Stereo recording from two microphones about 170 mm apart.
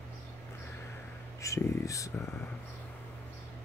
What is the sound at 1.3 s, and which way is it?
Speech, 20° left (ahead or behind).